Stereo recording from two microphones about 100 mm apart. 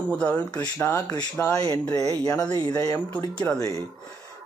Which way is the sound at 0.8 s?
25° left (ahead or behind).